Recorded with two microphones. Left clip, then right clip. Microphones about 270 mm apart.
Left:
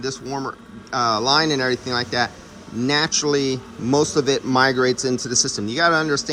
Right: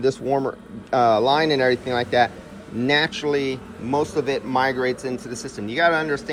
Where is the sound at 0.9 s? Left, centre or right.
Centre.